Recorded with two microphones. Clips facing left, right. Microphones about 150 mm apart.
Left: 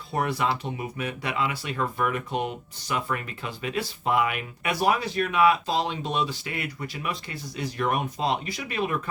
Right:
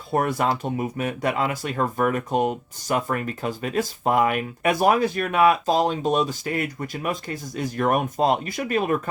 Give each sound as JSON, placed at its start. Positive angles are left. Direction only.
{"t": 0.1, "sound": "speech", "side_deg": -50}